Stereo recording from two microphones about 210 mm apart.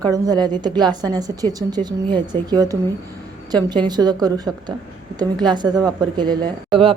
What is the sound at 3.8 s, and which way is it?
A woman's voice, 20° right (ahead or behind).